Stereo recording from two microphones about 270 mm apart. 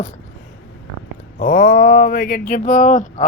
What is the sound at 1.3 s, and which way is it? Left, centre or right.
Speech, left.